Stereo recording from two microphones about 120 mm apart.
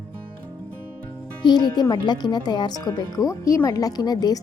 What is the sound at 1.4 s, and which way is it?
Speech, 35° left (ahead or behind).